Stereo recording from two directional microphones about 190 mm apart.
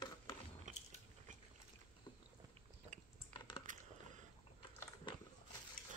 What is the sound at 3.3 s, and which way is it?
Typing, 25° left (ahead or behind).